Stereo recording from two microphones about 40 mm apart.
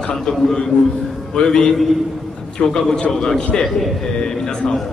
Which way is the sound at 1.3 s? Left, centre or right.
Centre.